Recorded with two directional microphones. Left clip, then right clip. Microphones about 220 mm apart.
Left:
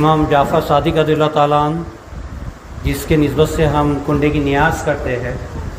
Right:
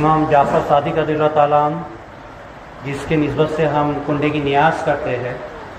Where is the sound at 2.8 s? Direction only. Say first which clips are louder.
Left 3 dB; 65° left (ahead or behind); by 5.1 s 40° left (ahead or behind).